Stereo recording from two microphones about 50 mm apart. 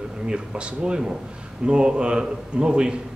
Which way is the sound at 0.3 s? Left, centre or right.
Right.